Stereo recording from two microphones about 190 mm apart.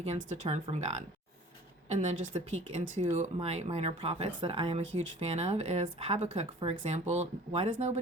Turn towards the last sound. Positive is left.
turn(degrees=-35)  # may be behind; listen again after turning